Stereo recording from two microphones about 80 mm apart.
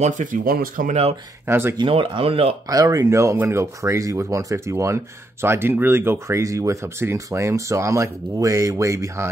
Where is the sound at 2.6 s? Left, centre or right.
Right.